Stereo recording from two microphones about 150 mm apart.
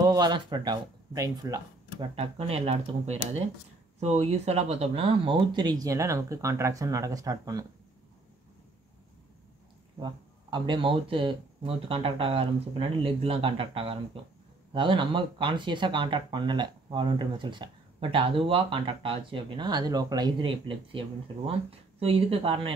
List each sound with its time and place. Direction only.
0.0 s speech: 25° right (ahead or behind)
2.1 s speech: 40° right (ahead or behind); by 7.6 s 25° right (ahead or behind)
9.9 s speech: 30° right (ahead or behind)